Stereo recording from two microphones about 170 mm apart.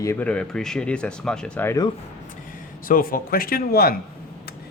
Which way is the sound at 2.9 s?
55° left (ahead or behind).